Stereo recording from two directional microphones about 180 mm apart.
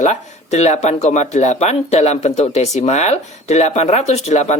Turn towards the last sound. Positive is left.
turn(degrees=40)  # may be behind; listen again after turning